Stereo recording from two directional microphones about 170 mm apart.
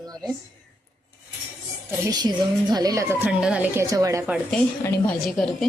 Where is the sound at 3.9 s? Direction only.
20° right (ahead or behind).